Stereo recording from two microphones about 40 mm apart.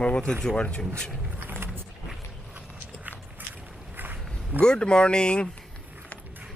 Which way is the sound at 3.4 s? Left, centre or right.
Right.